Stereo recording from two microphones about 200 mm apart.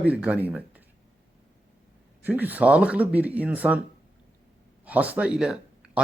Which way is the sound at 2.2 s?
10° right (ahead or behind).